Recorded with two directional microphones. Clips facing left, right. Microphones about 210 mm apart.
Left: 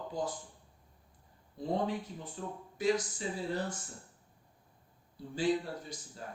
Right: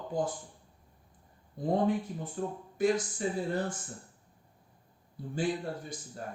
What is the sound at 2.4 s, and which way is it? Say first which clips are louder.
Speech: right 7 dB; 50° right (ahead or behind).